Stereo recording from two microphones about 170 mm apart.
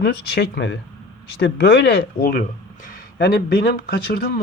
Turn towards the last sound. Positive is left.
turn(degrees=60)  # may be behind; listen again after turning